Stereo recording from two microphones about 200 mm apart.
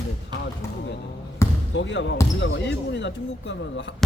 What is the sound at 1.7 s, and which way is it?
Speech, 65° left (ahead or behind).